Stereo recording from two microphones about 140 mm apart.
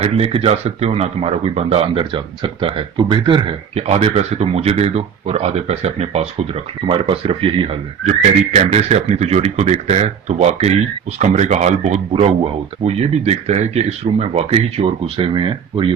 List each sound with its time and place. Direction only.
0.0 s speech: 45° right (ahead or behind)
6.8 s speech: 40° right (ahead or behind)